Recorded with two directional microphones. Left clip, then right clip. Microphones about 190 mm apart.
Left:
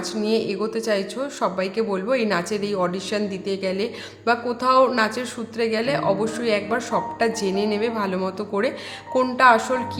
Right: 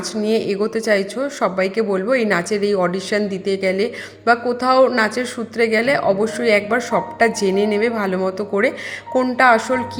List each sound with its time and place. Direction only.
0.2 s a woman's voice: 20° right (ahead or behind)